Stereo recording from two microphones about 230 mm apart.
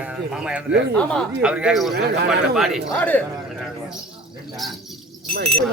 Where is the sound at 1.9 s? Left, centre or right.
Right.